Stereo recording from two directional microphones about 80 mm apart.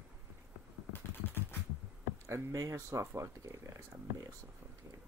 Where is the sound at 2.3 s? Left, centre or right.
Right.